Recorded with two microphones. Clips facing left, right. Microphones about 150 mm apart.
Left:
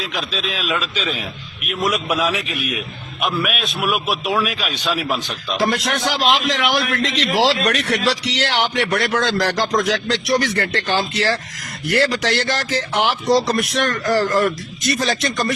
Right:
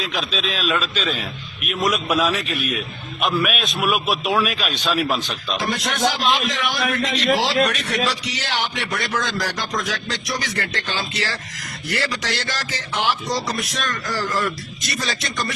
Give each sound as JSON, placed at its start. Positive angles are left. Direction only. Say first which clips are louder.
{"t": 0.0, "sound": "a man's voice", "louder": "even", "side_deg": 10}
{"t": 5.5, "sound": "a man's voice", "louder": "left 6 dB", "side_deg": 75}
{"t": 6.1, "sound": "a man's voice", "louder": "left 3 dB", "side_deg": 85}